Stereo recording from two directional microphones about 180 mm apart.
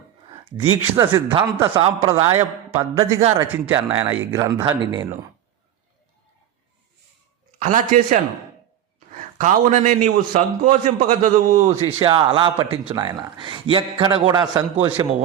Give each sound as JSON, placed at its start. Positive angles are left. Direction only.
{"t": 0.5, "sound": "a man's voice", "side_deg": -15}
{"t": 2.3, "sound": "a man's voice", "side_deg": -15}
{"t": 7.6, "sound": "a man's voice", "side_deg": -45}